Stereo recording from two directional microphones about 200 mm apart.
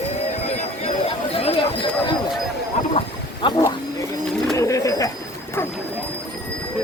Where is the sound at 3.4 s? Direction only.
25° left (ahead or behind).